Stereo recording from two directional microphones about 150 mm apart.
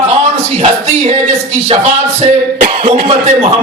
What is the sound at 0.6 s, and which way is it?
A man's voice, 50° right (ahead or behind).